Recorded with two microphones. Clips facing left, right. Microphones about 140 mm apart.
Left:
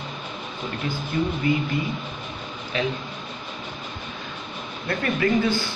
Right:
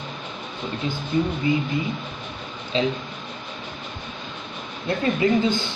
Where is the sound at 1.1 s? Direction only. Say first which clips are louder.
Right 2 dB; 15° right (ahead or behind).